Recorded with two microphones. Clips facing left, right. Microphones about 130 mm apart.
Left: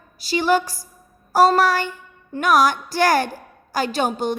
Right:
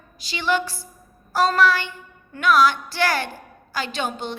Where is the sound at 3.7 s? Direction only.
40° left (ahead or behind).